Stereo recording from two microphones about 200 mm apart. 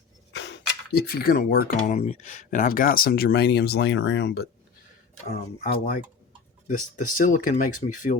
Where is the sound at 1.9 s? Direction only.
35° left (ahead or behind); by 4.4 s 60° left (ahead or behind).